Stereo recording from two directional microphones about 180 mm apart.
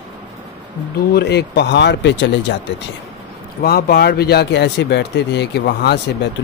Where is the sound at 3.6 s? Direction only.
60° left (ahead or behind).